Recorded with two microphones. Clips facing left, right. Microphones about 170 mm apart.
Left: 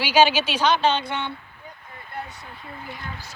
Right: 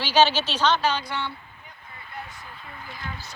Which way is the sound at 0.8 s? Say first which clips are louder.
Left 3 dB; 25° left (ahead or behind).